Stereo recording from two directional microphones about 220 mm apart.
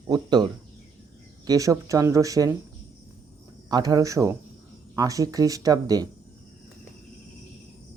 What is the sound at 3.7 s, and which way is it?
Speech, 15° right (ahead or behind).